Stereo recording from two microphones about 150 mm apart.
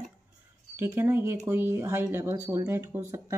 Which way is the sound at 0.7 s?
15° right (ahead or behind).